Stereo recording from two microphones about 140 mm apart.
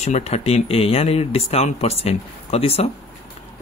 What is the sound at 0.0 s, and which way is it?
Speech, 50° left (ahead or behind).